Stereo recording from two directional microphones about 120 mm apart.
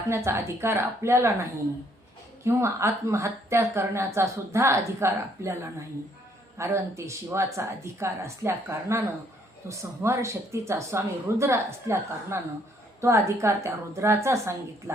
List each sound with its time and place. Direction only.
0.1 s a woman's voice: 20° right (ahead or behind)
6.6 s a woman's voice: 25° right (ahead or behind)